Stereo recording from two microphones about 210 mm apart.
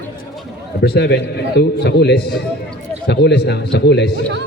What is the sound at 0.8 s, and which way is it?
A man's voice, 50° left (ahead or behind).